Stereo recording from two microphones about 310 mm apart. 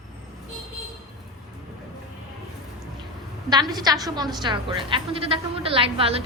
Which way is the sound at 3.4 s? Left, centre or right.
Centre.